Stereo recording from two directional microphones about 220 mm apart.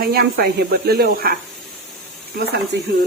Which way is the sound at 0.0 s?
45° right (ahead or behind).